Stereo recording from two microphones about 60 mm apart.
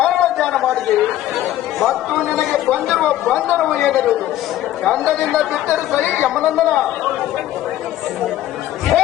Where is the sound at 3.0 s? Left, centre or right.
Centre.